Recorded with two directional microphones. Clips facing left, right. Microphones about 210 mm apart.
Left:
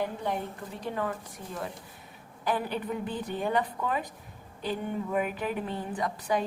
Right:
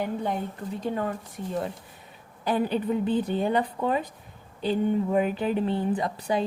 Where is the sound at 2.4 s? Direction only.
20° right (ahead or behind).